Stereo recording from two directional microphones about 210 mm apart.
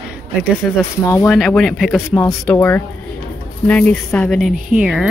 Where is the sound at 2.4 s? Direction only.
10° left (ahead or behind).